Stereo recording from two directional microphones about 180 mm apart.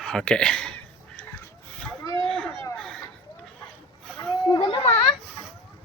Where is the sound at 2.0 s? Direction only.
25° right (ahead or behind).